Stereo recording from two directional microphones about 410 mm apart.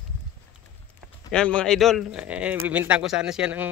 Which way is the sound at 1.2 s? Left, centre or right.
Centre.